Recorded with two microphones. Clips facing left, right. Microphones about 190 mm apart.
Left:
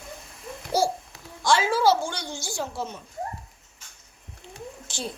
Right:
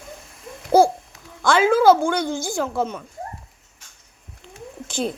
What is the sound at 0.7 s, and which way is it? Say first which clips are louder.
Babbling: right 9 dB; 55° right (ahead or behind).